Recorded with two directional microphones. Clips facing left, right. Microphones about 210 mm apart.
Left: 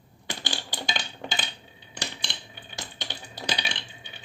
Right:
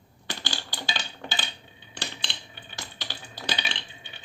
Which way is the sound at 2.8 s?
20° left (ahead or behind).